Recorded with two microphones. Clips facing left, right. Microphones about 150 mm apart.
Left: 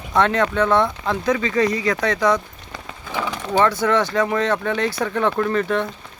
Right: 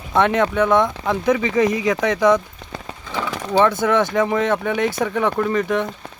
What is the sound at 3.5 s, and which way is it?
Speech, 20° right (ahead or behind).